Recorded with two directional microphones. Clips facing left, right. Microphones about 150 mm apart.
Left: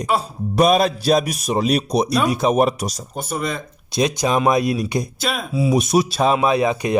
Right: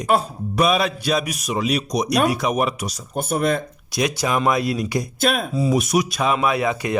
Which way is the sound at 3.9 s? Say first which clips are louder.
Left 3 dB; 20° left (ahead or behind).